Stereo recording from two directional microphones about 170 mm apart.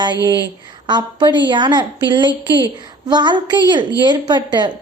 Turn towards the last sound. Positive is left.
turn(degrees=-25)  # may be behind; listen again after turning